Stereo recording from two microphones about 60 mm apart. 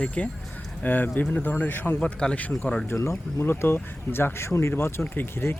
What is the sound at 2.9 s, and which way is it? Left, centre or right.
Speech, left.